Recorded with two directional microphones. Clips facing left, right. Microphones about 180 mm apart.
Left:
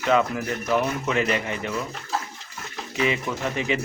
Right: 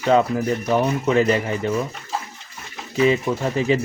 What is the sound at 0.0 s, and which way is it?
Speech, 30° right (ahead or behind).